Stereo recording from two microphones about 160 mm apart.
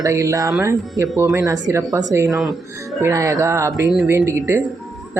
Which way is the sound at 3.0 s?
20° right (ahead or behind).